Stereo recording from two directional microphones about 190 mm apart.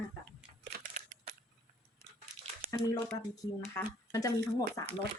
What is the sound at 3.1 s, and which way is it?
Speech, 20° left (ahead or behind).